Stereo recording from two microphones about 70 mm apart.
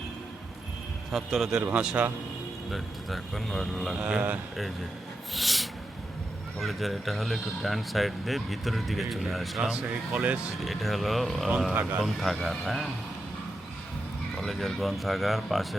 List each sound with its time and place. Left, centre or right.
1.1 s speech: centre
1.6 s a man's voice: centre
2.6 s speech: centre
4.0 s a man's voice: right
5.3 s a sound: centre
6.6 s speech: centre
9.9 s a man's voice: right
10.7 s speech: centre
11.7 s speech: right
12.0 s speech: centre
14.3 s speech: centre